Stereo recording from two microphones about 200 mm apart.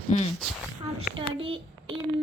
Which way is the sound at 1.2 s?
25° right (ahead or behind).